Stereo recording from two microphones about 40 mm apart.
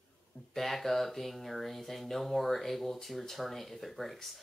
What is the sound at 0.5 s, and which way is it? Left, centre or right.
Speech, centre.